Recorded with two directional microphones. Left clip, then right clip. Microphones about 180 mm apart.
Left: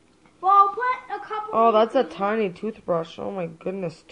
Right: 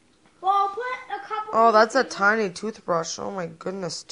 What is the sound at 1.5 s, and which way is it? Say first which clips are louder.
Speech: right 1 dB; 20° right (ahead or behind).